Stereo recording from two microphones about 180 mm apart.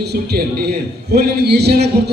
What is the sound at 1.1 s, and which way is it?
Speech, 65° right (ahead or behind).